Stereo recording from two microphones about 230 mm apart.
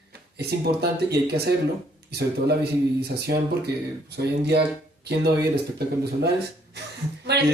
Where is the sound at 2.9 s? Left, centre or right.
Right.